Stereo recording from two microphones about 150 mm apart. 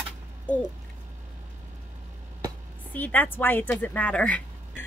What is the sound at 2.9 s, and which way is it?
A woman's voice, 10° left (ahead or behind).